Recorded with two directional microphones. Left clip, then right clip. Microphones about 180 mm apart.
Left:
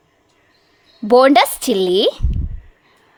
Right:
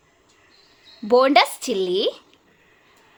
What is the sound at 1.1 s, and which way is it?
A woman's voice, 35° left (ahead or behind).